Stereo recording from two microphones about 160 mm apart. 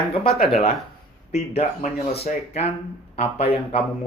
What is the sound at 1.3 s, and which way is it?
Speech, 40° left (ahead or behind).